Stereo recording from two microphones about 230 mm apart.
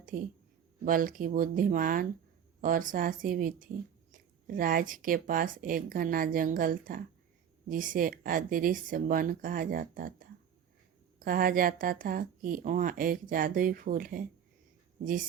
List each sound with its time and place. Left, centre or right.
0.1 s speech: right